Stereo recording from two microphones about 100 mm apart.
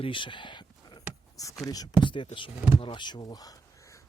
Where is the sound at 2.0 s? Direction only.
55° left (ahead or behind).